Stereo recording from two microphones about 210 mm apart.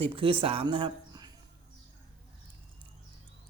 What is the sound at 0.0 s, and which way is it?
Speech, 25° right (ahead or behind).